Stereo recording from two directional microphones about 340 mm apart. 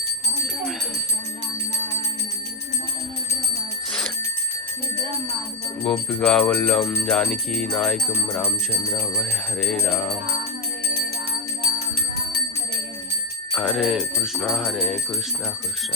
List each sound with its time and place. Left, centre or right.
5.8 s music: centre
13.5 s music: centre